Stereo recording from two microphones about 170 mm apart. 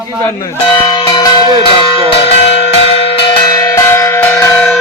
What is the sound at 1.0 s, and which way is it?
Music, 25° left (ahead or behind).